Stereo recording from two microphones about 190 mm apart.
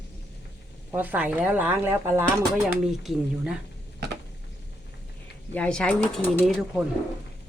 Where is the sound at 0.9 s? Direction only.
10° right (ahead or behind).